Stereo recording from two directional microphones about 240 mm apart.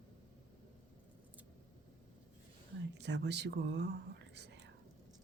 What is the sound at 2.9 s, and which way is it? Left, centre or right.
Speech, right.